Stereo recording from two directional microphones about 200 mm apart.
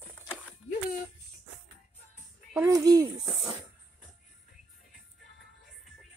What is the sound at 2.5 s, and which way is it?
Speech, 15° right (ahead or behind).